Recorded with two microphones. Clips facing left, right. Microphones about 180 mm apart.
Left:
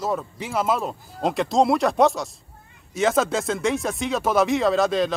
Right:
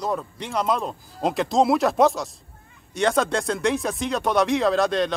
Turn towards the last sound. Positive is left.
turn(degrees=0)  # may be behind; listen again after turning